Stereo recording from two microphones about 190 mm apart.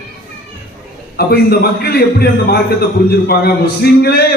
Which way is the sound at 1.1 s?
55° left (ahead or behind).